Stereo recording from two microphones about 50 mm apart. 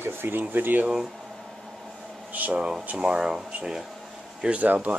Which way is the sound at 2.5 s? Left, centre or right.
Centre.